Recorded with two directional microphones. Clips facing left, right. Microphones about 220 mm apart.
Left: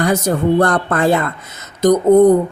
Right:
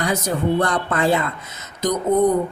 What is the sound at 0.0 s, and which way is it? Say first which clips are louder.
Speech: left 6 dB; 50° left (ahead or behind).